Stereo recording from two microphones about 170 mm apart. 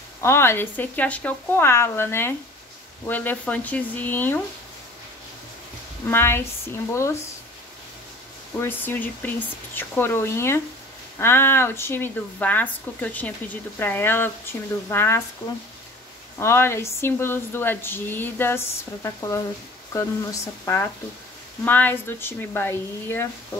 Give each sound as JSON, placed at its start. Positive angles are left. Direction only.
{"t": 0.2, "sound": "speech", "side_deg": 15}
{"t": 6.0, "sound": "speech", "side_deg": 15}
{"t": 8.5, "sound": "speech", "side_deg": 10}
{"t": 16.3, "sound": "speech", "side_deg": 15}